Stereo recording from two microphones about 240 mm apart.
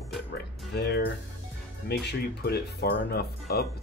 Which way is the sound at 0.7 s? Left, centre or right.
Left.